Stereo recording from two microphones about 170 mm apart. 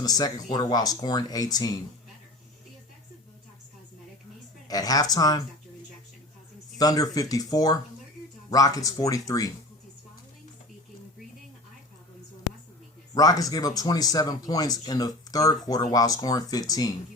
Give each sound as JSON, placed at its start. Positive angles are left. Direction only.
{"t": 0.0, "sound": "speech", "side_deg": 20}
{"t": 4.7, "sound": "speech", "side_deg": 20}
{"t": 6.7, "sound": "speech", "side_deg": 20}
{"t": 13.1, "sound": "speech", "side_deg": 20}